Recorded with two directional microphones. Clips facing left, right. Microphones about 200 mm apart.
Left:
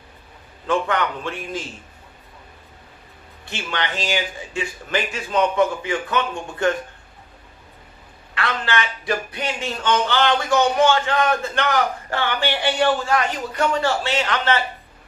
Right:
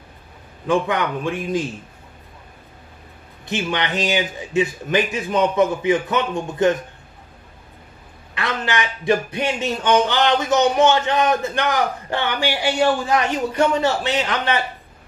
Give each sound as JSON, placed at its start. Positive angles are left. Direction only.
{"t": 0.7, "sound": "speech", "side_deg": -15}
{"t": 3.4, "sound": "speech", "side_deg": -20}
{"t": 8.4, "sound": "speech", "side_deg": -15}